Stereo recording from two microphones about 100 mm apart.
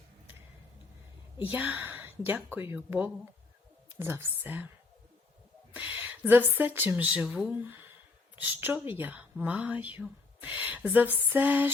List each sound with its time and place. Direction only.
1.4 s speech: 15° right (ahead or behind)
5.7 s speech: 15° right (ahead or behind)